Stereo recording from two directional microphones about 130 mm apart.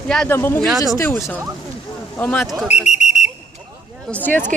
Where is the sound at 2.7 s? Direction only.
60° left (ahead or behind).